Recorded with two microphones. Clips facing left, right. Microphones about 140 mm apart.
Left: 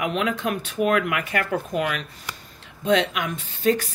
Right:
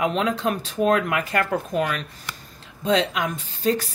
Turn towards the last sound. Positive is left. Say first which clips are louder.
# left 1 dB
turn(degrees=-35)  # may be behind; listen again after turning